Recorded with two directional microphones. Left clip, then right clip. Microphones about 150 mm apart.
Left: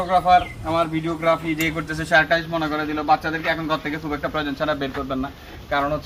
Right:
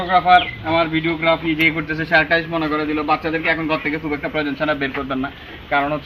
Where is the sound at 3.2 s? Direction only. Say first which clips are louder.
Right 4 dB; 20° left (ahead or behind).